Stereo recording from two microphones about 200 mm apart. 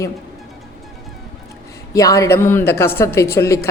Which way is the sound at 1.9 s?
15° left (ahead or behind).